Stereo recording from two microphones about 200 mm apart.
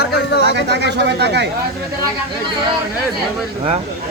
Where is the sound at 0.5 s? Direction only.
55° right (ahead or behind).